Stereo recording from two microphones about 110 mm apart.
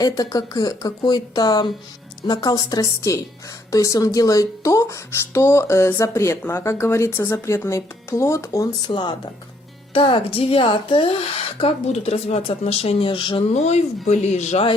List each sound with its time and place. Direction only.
0.0 s speech: 35° left (ahead or behind)
8.8 s speech: 40° left (ahead or behind)
9.9 s speech: 60° left (ahead or behind)
13.5 s speech: 90° left